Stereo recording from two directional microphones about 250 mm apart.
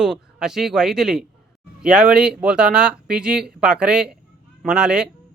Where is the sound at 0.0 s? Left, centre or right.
Centre.